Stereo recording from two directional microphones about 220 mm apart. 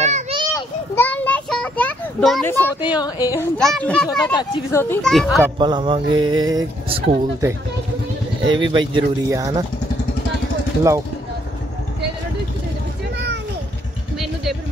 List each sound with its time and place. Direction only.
0.0 s children playing: 30° right (ahead or behind)
0.6 s children playing: 10° left (ahead or behind)
3.0 s speech: 15° left (ahead or behind)
3.5 s a child's voice: 5° left (ahead or behind)
4.3 s speech: 15° left (ahead or behind)
5.6 s speech: 20° right (ahead or behind)
8.5 s speech: 20° right (ahead or behind)